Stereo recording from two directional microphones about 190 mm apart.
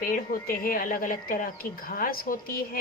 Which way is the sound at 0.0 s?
50° left (ahead or behind).